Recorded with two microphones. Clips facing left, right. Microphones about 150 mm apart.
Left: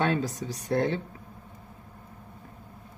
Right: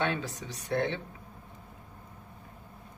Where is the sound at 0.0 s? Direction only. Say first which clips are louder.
Left 5 dB; 40° left (ahead or behind).